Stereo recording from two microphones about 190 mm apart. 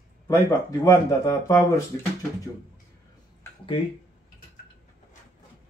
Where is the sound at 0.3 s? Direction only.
20° left (ahead or behind).